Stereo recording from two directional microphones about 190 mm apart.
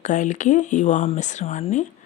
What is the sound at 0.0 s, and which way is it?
Speech, 40° left (ahead or behind).